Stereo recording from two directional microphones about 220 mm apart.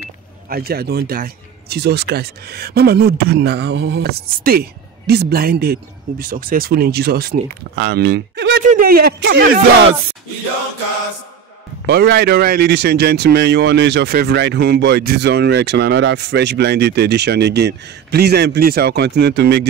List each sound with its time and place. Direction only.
0.5 s speech: 45° right (ahead or behind)
11.8 s speech: 50° right (ahead or behind)